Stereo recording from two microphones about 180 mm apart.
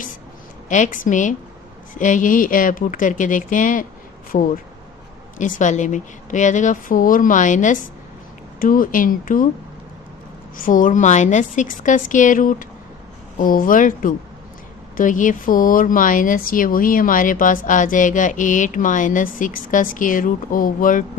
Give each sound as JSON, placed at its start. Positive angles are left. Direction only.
{"t": 0.7, "sound": "speech", "side_deg": 45}
{"t": 10.6, "sound": "speech", "side_deg": 50}